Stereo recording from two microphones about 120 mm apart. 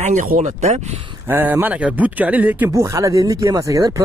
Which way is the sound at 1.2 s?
15° right (ahead or behind).